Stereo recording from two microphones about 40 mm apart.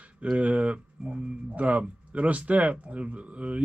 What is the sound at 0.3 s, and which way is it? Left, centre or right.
Speech, right.